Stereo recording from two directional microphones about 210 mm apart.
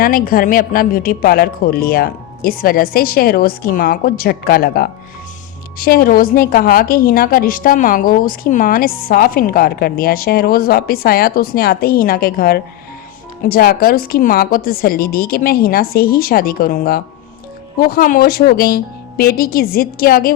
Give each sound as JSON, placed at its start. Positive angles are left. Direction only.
{"t": 0.0, "sound": "a woman's voice", "side_deg": 45}